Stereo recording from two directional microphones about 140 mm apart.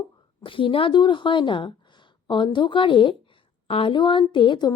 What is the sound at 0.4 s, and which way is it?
Speech, 40° left (ahead or behind).